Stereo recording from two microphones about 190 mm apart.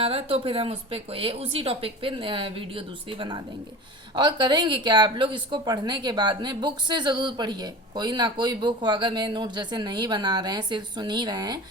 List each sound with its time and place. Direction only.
0.0 s speech: 30° right (ahead or behind)